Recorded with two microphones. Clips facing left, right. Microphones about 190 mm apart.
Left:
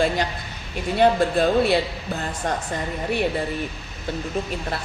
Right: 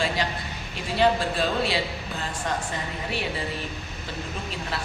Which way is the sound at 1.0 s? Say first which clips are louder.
Left 5 dB; 55° left (ahead or behind).